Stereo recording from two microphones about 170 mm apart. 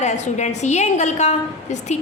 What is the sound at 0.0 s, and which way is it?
A woman's voice, 45° left (ahead or behind).